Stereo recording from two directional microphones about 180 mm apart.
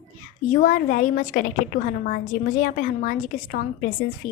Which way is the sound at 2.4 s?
45° left (ahead or behind).